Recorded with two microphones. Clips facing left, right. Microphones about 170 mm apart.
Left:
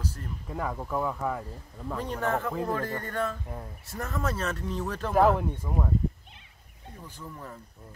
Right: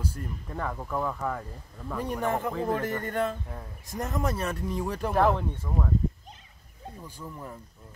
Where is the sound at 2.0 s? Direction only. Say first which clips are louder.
Right 1 dB; 10° right (ahead or behind).